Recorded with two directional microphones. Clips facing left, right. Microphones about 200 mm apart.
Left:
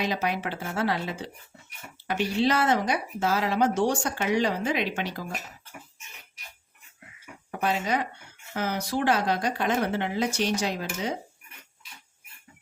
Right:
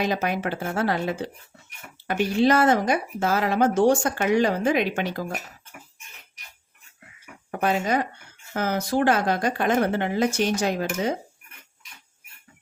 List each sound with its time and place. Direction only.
0.0 s speech: 50° right (ahead or behind)
7.5 s speech: 50° right (ahead or behind)